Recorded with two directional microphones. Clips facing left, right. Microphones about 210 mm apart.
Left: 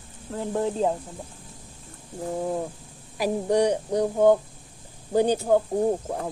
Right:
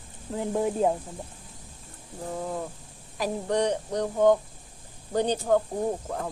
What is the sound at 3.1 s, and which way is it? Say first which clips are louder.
Speech: left 4 dB; 10° left (ahead or behind).